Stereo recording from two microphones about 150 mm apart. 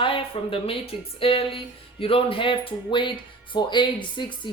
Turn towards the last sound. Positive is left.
turn(degrees=30)  # may be behind; listen again after turning